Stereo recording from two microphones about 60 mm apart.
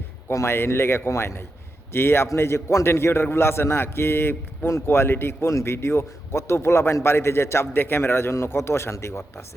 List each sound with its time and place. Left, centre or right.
0.4 s a man's voice: left